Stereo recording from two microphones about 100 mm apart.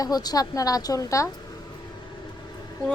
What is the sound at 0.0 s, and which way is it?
A woman's voice, 40° left (ahead or behind).